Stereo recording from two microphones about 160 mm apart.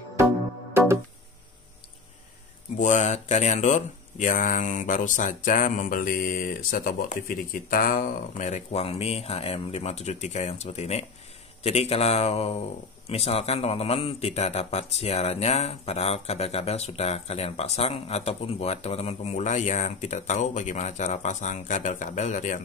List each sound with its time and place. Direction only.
2.8 s a man's voice: 50° left (ahead or behind)